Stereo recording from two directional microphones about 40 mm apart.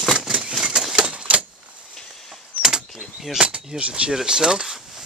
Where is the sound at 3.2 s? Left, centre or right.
Centre.